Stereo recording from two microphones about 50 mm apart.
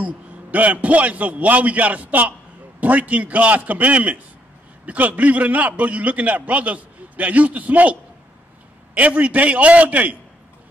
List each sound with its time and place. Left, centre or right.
0.0 s a man's voice: right